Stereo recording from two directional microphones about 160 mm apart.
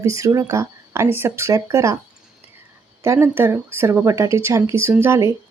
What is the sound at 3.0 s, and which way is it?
Speech, 15° right (ahead or behind).